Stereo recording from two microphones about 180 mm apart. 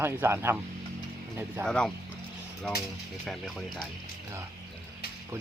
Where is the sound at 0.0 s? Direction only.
15° right (ahead or behind).